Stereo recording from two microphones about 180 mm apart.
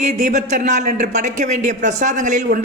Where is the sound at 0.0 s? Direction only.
40° right (ahead or behind).